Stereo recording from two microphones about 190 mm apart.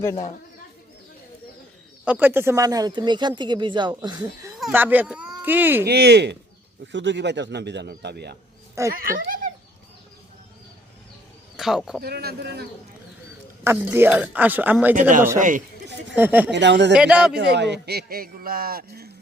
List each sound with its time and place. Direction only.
2.0 s speech: 10° right (ahead or behind)
4.5 s speech: 5° right (ahead or behind)
5.8 s a man's voice: 60° right (ahead or behind)
8.9 s speech: 50° right (ahead or behind)
11.5 s speech: centre (ahead or behind)
12.0 s a man's voice: 55° right (ahead or behind)
13.7 s speech: 10° right (ahead or behind)
15.4 s speech: 45° right (ahead or behind)
16.1 s speech: 10° right (ahead or behind)
16.5 s speech: 65° right (ahead or behind)
16.9 s speech: 5° right (ahead or behind)
17.3 s a man's voice: 60° right (ahead or behind)